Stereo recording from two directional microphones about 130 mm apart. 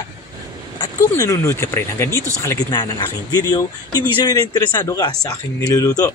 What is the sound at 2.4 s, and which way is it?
Speech, 30° left (ahead or behind).